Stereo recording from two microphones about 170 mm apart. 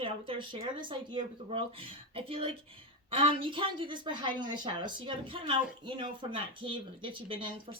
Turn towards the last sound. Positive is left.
turn(degrees=-30)  # may be behind; listen again after turning